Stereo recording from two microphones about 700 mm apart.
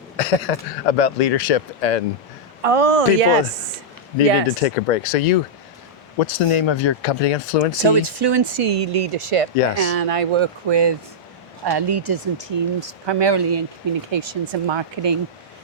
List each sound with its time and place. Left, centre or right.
0.2 s speech: left
2.6 s speech: right
4.6 s speech: left
6.1 s speech: left
7.9 s speech: right